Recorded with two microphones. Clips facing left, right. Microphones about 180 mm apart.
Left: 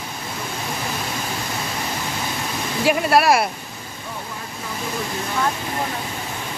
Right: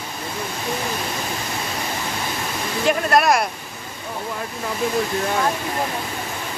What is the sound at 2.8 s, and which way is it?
Speech, 5° left (ahead or behind).